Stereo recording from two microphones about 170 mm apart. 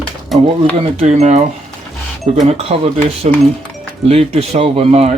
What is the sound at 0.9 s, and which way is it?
Speech, 40° right (ahead or behind).